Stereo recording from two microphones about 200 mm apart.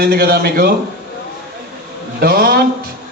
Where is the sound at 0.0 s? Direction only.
50° right (ahead or behind).